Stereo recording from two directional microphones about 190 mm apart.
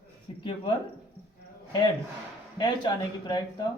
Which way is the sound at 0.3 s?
25° left (ahead or behind).